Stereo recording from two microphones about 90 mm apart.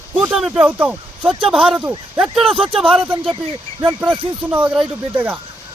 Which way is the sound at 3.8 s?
15° right (ahead or behind).